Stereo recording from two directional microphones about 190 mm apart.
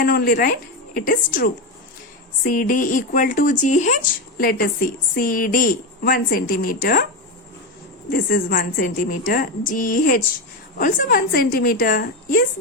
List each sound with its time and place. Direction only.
0.0 s speech: 55° left (ahead or behind)
8.1 s speech: 50° left (ahead or behind)